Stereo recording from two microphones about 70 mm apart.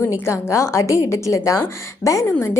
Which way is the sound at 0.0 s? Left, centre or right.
Left.